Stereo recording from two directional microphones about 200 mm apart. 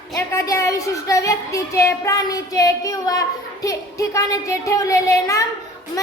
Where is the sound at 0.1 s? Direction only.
15° left (ahead or behind).